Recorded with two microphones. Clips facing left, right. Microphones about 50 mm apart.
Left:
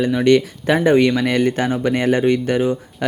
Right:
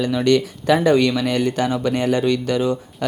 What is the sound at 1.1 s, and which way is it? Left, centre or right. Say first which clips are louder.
Speech: left 3 dB; left.